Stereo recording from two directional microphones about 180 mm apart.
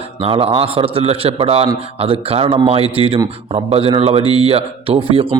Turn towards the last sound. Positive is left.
turn(degrees=-30)  # may be behind; listen again after turning